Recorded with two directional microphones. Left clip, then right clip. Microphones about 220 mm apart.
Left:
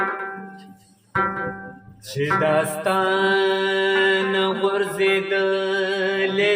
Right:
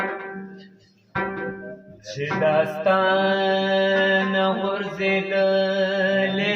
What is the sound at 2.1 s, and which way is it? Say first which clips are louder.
Mantra: left 1 dB; 50° left (ahead or behind).